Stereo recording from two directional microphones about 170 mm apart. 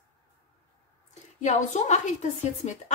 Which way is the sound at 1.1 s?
45° left (ahead or behind).